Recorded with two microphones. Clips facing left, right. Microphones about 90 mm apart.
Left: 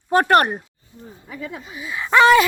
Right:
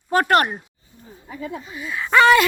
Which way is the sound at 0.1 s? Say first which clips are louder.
Left 2 dB; 30° left (ahead or behind).